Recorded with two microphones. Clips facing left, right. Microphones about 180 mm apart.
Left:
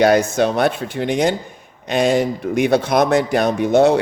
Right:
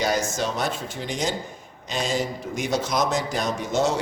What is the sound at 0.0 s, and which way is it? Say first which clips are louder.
Speech: left 10 dB; 60° left (ahead or behind).